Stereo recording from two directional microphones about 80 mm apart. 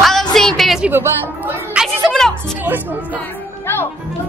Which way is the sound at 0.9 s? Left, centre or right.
Right.